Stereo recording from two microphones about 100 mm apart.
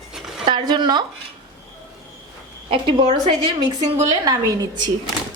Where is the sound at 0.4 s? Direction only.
45° right (ahead or behind).